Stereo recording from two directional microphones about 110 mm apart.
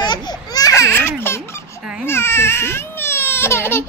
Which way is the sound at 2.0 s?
20° left (ahead or behind).